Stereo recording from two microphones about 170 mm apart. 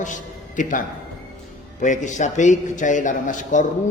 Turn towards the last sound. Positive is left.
turn(degrees=45)  # may be behind; listen again after turning